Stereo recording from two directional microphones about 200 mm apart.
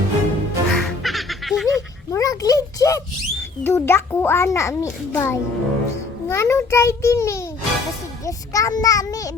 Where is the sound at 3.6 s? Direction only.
10° left (ahead or behind).